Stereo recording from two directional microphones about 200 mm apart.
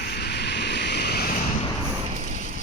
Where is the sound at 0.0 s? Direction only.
55° left (ahead or behind).